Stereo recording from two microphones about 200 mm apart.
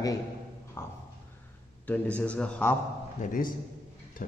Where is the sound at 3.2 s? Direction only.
45° left (ahead or behind).